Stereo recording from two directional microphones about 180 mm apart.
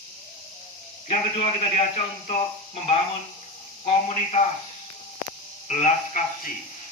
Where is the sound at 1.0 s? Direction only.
35° left (ahead or behind).